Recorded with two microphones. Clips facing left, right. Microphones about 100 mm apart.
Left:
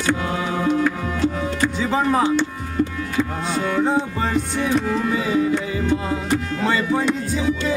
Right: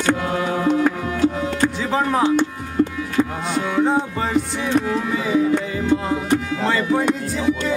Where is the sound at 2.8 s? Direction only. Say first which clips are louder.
Right 3 dB; 40° right (ahead or behind).